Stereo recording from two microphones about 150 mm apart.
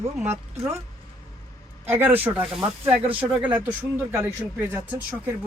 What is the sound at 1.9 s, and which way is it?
Speech, 15° right (ahead or behind).